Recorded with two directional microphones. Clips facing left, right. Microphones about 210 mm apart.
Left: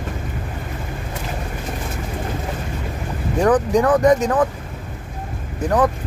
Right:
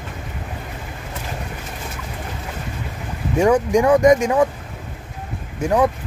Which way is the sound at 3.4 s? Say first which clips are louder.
Right 1 dB; 10° right (ahead or behind).